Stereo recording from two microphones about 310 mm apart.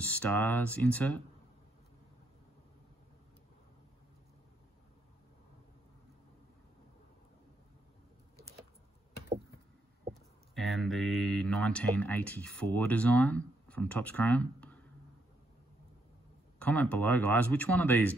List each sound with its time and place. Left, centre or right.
0.0 s speech: centre
10.5 s speech: centre
16.5 s speech: centre